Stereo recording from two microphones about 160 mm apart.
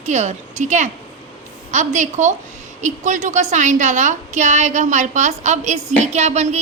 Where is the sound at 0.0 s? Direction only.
45° right (ahead or behind).